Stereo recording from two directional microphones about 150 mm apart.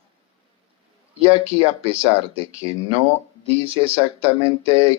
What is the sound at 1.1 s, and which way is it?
Speech, 40° right (ahead or behind).